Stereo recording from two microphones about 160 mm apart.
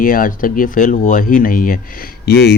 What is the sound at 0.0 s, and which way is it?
Speech, 60° left (ahead or behind).